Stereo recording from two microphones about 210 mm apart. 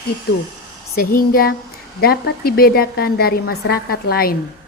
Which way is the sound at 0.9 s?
45° left (ahead or behind).